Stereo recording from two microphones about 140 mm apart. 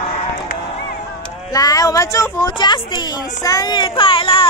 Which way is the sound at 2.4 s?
35° left (ahead or behind).